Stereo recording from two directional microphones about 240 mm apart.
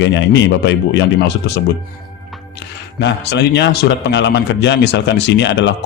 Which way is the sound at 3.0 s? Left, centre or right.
Left.